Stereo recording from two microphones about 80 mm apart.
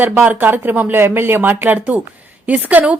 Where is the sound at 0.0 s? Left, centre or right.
Right.